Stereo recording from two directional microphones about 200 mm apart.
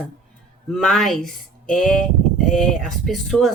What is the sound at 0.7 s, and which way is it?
Speech, centre (ahead or behind).